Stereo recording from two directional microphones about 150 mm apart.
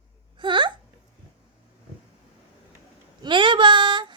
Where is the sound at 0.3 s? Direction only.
30° right (ahead or behind).